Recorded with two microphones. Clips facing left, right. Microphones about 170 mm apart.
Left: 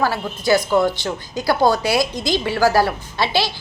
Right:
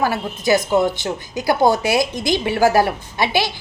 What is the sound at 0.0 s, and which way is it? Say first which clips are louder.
A woman's voice: right 1 dB; 20° right (ahead or behind).